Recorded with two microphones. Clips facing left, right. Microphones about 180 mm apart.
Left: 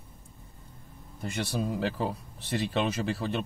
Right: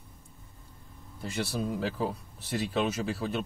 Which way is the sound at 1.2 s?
5° left (ahead or behind).